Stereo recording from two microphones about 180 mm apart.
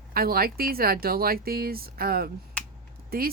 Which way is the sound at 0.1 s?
55° right (ahead or behind).